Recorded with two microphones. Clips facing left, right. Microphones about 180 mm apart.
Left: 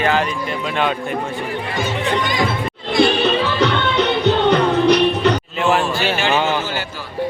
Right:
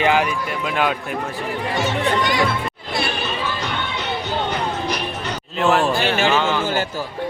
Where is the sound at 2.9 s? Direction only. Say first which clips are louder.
Left 10 dB; 75° left (ahead or behind).